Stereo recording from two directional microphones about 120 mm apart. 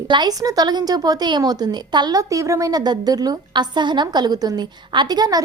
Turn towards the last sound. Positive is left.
turn(degrees=-35)  # may be behind; listen again after turning